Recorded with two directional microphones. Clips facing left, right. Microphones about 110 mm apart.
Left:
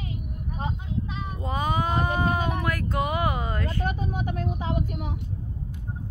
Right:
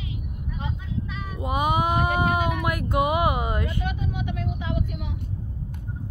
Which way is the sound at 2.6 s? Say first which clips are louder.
Right 3 dB; 15° right (ahead or behind).